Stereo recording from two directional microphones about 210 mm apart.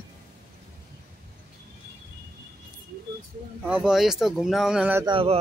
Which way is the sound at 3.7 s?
Centre (ahead or behind).